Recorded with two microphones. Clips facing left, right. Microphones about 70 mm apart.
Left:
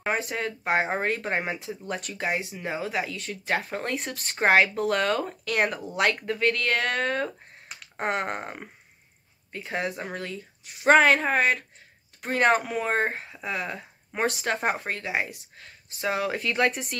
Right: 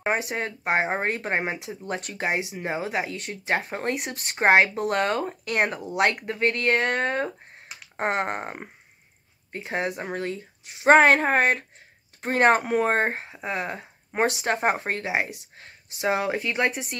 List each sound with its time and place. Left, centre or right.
0.3 s speech: right
1.9 s speech: right
7.6 s a sound: centre
8.0 s speech: right
10.1 s speech: right
16.3 s speech: centre